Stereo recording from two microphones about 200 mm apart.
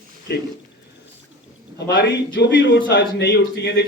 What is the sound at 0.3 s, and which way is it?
Speech, 55° left (ahead or behind).